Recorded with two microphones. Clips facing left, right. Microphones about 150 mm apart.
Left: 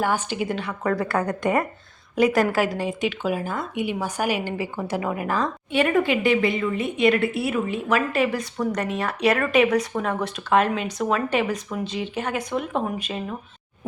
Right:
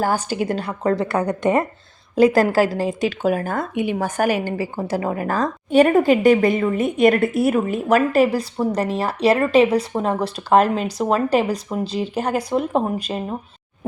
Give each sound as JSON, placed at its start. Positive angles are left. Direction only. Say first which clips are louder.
{"t": 0.0, "sound": "speech", "louder": "right 3 dB", "side_deg": -35}
{"t": 0.8, "sound": "speech", "louder": "right 3 dB", "side_deg": -25}
{"t": 2.1, "sound": "speech", "louder": "right 5 dB", "side_deg": -30}